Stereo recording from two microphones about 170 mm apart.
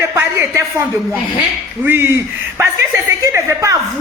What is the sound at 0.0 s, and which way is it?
Speech, 15° right (ahead or behind).